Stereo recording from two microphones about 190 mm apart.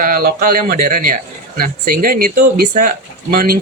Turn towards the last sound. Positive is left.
turn(degrees=-50)  # may be behind; listen again after turning